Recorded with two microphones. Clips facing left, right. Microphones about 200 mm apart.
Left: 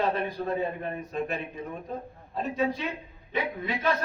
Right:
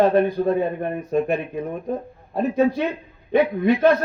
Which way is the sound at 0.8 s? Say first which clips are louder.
Right 9 dB; 55° right (ahead or behind).